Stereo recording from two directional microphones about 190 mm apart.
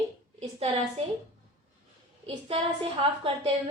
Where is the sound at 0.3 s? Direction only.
35° right (ahead or behind).